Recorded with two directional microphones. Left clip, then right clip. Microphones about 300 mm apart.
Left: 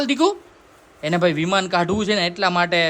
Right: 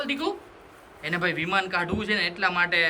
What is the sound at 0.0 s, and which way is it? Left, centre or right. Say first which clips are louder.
A man's voice: left 9 dB; centre.